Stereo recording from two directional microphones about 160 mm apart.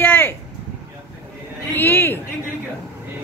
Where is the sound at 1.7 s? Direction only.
15° left (ahead or behind).